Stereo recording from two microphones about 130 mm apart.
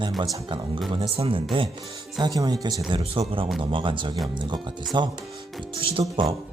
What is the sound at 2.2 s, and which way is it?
Speech, 30° right (ahead or behind).